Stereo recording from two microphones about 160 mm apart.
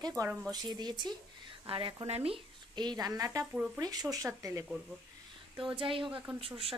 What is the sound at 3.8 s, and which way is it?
Speech, 25° right (ahead or behind).